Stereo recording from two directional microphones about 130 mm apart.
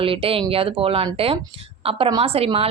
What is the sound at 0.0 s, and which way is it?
Speech, 45° right (ahead or behind).